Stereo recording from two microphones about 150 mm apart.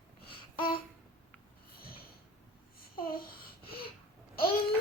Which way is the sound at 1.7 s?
85° left.